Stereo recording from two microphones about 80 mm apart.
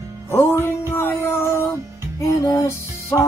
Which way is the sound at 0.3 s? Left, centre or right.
Left.